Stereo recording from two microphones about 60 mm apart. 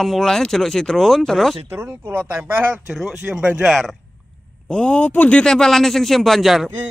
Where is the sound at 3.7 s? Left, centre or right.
Centre.